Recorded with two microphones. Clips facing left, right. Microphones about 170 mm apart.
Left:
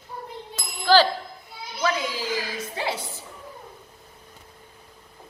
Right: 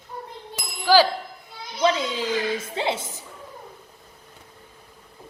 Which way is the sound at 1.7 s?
25° right (ahead or behind).